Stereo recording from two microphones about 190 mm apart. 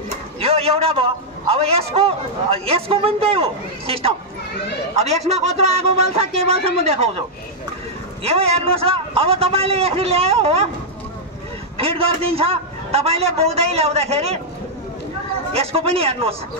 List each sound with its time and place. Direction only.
0.4 s a sound: 30° right (ahead or behind)
1.5 s a man's voice: 30° right (ahead or behind)
5.3 s a man's voice: 35° right (ahead or behind)
8.2 s a man's voice: 30° right (ahead or behind)
11.7 s a man's voice: 30° right (ahead or behind)
15.5 s a man's voice: 30° right (ahead or behind)